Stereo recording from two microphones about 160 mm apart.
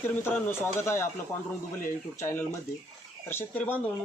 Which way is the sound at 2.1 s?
15° left (ahead or behind).